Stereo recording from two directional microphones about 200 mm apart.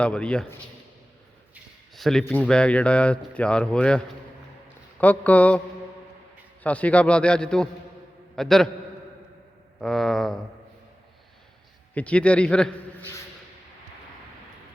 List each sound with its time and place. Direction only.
0.0 s speech: 5° left (ahead or behind)
2.0 s a man's voice: centre (ahead or behind)
9.8 s speech: centre (ahead or behind)
11.9 s a man's voice: 5° left (ahead or behind)